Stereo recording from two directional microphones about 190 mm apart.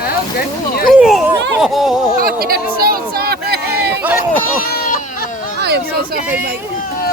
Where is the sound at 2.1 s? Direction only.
50° right (ahead or behind).